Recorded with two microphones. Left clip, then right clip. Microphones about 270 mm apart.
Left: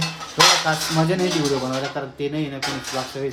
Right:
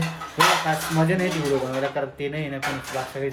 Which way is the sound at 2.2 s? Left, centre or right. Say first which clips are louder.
Left 3 dB; centre.